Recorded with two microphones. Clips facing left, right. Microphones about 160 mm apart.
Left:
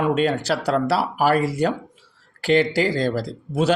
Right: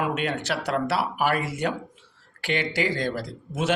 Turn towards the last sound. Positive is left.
turn(degrees=35)  # may be behind; listen again after turning